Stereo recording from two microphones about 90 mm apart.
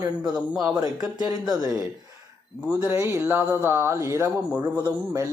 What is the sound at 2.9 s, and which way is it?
Speech, 25° right (ahead or behind).